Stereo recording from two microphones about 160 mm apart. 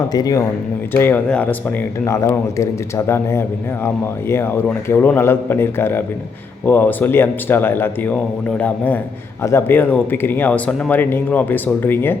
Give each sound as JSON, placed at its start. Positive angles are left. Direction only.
{"t": 0.1, "sound": "speech", "side_deg": 25}
{"t": 0.9, "sound": "speech", "side_deg": 10}